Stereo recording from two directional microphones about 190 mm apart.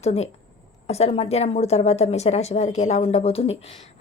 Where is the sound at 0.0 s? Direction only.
35° left (ahead or behind).